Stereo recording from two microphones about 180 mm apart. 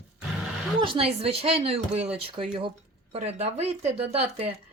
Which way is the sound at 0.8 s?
30° right (ahead or behind).